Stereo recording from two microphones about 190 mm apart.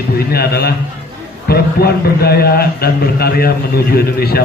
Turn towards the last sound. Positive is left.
turn(degrees=55)  # may be behind; listen again after turning